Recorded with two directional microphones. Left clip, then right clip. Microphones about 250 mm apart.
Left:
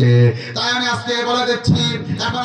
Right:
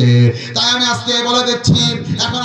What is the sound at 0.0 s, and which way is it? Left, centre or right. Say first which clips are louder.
Music: right 1 dB; right.